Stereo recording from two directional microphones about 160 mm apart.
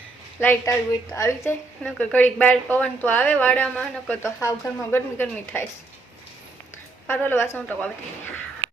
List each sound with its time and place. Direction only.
0.3 s a woman's voice: 15° left (ahead or behind)
1.8 s a woman's voice: 5° left (ahead or behind)
7.1 s a woman's voice: 10° left (ahead or behind)